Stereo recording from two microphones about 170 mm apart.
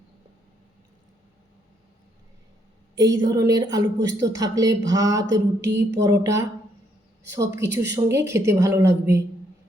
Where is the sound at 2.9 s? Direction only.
20° right (ahead or behind).